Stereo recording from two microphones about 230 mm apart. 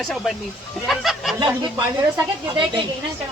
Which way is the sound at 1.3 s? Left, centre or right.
Centre.